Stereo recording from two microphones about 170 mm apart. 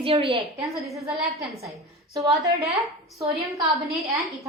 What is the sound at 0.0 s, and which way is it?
Speech, 35° right (ahead or behind).